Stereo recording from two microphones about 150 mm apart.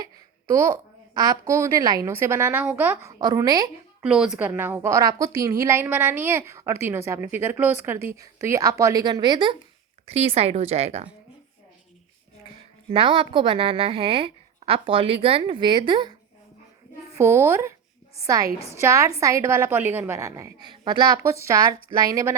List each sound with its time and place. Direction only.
0.4 s a woman's voice: 20° right (ahead or behind)
3.2 s a woman's voice: 25° right (ahead or behind)
4.0 s a woman's voice: 5° right (ahead or behind); by 9.6 s 30° right (ahead or behind)
10.1 s speech: 40° right (ahead or behind)
12.9 s a woman's voice: 35° right (ahead or behind)
17.2 s a woman's voice: 15° right (ahead or behind)